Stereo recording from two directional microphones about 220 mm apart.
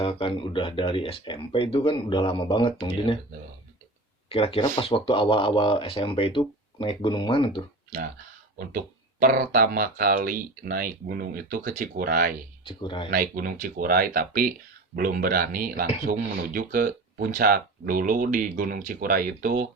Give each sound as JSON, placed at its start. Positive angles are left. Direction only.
{"t": 0.0, "sound": "speech", "side_deg": 25}
{"t": 4.3, "sound": "speech", "side_deg": 25}
{"t": 8.5, "sound": "speech", "side_deg": -40}
{"t": 12.6, "sound": "speech", "side_deg": 20}
{"t": 13.1, "sound": "speech", "side_deg": -40}